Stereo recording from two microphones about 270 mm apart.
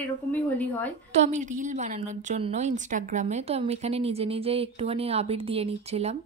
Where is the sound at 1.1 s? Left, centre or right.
Right.